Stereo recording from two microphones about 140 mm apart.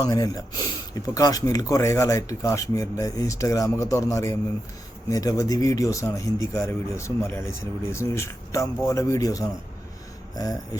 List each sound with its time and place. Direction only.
0.0 s speech: 25° left (ahead or behind)